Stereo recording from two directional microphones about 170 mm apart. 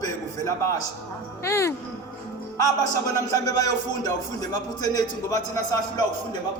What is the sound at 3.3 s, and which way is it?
Speech, 20° left (ahead or behind).